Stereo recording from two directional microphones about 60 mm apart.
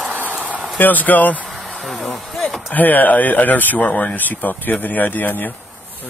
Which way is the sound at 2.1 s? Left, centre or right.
Centre.